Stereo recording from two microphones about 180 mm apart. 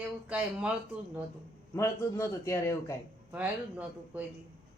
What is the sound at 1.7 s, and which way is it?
A man's voice, 15° left (ahead or behind).